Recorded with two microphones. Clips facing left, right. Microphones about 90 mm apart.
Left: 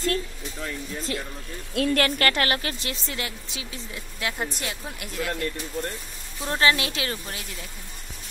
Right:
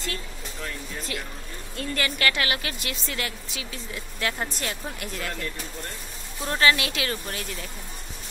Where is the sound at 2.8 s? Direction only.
25° left (ahead or behind).